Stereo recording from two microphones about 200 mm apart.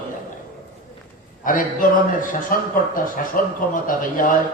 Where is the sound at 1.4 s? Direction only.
40° left (ahead or behind).